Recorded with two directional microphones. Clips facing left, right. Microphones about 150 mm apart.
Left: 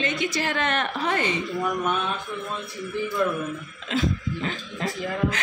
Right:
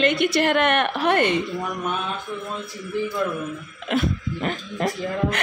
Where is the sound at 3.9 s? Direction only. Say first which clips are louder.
Right 2 dB; 60° right (ahead or behind).